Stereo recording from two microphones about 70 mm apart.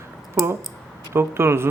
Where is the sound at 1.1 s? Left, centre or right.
Right.